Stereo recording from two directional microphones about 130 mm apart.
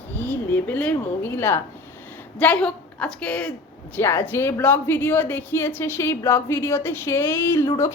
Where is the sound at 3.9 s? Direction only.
20° left (ahead or behind).